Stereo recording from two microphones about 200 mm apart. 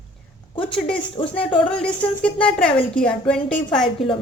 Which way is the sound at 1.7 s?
5° left (ahead or behind).